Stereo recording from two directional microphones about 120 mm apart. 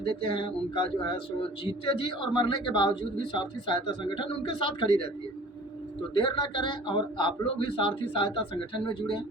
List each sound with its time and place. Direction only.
0.3 s speech: 45° left (ahead or behind)
6.1 s speech: 45° left (ahead or behind)